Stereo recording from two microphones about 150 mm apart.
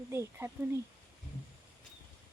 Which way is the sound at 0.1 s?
15° right (ahead or behind).